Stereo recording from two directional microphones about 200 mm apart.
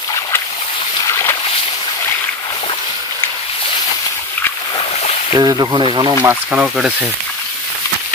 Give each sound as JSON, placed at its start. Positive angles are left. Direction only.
{"t": 5.3, "sound": "speech", "side_deg": -20}
{"t": 6.2, "sound": "speech", "side_deg": -5}